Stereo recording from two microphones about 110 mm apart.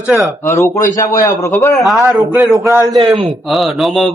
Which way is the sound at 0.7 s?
30° left (ahead or behind).